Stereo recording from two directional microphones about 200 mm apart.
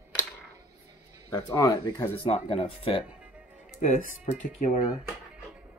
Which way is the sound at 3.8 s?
40° left (ahead or behind).